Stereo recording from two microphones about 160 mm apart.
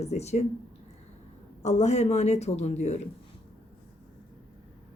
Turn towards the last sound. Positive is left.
turn(degrees=45)  # may be behind; listen again after turning